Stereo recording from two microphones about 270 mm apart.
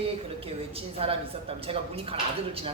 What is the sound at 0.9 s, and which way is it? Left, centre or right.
A man's voice, right.